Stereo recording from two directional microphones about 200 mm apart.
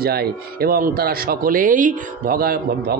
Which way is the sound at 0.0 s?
50° right (ahead or behind).